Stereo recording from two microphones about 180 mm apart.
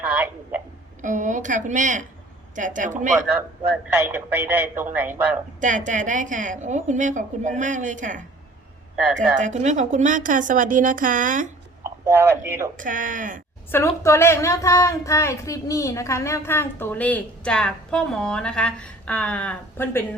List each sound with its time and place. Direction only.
0.0 s a sound: 10° right (ahead or behind)
1.0 s a woman's voice: 45° right (ahead or behind)
4.1 s speech: 10° right (ahead or behind)
5.5 s a woman's voice: 45° right (ahead or behind)
9.4 s a woman's voice: 40° right (ahead or behind)
12.0 s speech: 15° right (ahead or behind)
12.7 s a woman's voice: 45° right (ahead or behind)
13.7 s a woman's voice: 15° left (ahead or behind)